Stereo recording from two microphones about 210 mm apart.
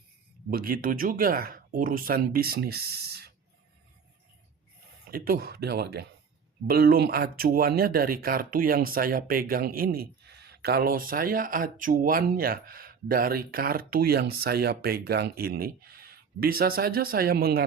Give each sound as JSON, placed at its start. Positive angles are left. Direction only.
{"t": 0.5, "sound": "speech", "side_deg": -45}
{"t": 5.1, "sound": "speech", "side_deg": -45}